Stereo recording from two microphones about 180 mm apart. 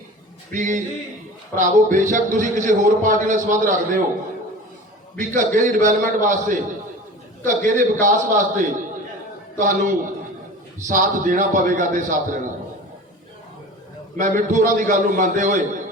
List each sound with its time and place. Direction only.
0.5 s a man's voice: 45° right (ahead or behind)
5.1 s a man's voice: 45° right (ahead or behind)
14.2 s a man's voice: 45° right (ahead or behind)